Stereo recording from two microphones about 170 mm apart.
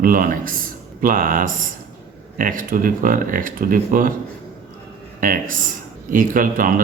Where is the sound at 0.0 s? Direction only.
55° right (ahead or behind).